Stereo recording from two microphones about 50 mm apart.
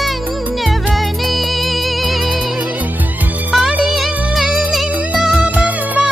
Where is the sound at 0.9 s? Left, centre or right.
Centre.